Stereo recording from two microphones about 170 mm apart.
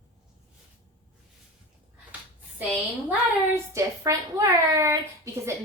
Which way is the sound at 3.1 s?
15° right (ahead or behind).